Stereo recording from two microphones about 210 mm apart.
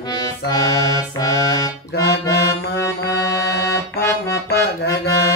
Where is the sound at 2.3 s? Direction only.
15° left (ahead or behind).